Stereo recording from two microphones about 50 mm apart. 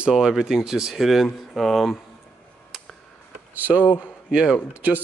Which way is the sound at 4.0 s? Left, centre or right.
Centre.